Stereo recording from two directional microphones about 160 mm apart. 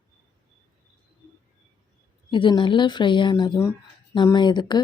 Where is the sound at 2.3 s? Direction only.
30° left (ahead or behind).